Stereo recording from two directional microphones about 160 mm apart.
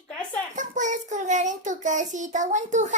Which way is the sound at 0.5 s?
50° right (ahead or behind).